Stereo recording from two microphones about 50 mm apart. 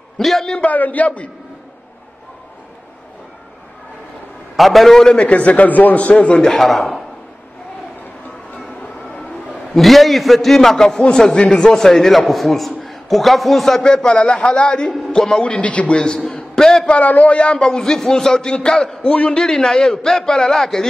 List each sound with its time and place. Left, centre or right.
0.2 s a man's voice: centre
0.6 s a man's voice: left
4.6 s a man's voice: centre
5.1 s a man's voice: left
6.4 s a man's voice: centre
9.8 s a man's voice: centre
13.9 s a man's voice: centre
14.9 s a man's voice: centre
15.1 s a man's voice: centre
15.6 s a man's voice: left
16.2 s a sound: centre
16.8 s a man's voice: left
17.6 s a man's voice: centre
19.4 s a man's voice: centre